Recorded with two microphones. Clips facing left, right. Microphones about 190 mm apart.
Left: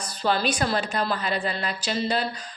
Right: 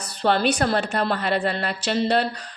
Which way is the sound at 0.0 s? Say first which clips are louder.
Right 4 dB; 65° right (ahead or behind).